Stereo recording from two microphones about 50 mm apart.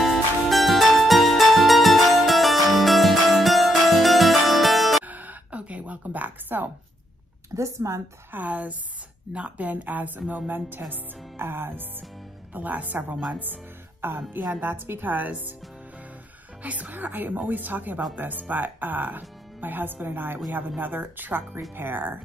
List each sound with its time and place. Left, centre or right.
0.0 s music: centre
5.0 s a sound: right
7.5 s speech: right
8.3 s speech: right
11.3 s music: right
12.5 s speech: right
14.0 s speech: right
16.6 s speech: right
21.7 s music: right